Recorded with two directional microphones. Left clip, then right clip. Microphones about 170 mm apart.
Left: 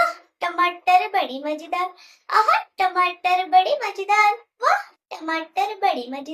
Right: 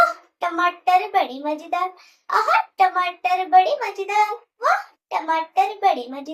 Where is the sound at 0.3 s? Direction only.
15° left (ahead or behind).